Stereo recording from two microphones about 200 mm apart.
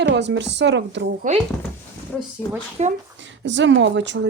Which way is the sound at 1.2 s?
40° right (ahead or behind).